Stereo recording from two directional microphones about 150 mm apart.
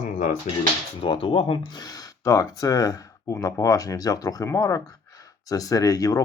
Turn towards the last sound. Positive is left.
turn(degrees=25)  # may be behind; listen again after turning